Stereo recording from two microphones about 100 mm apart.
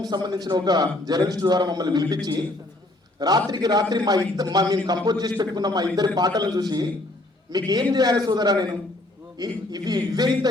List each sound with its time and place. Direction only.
0.0 s a man's voice: 45° right (ahead or behind)